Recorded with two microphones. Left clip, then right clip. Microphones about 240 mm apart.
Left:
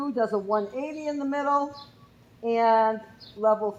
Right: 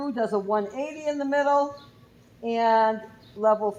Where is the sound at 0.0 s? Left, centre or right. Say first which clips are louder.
Even; right.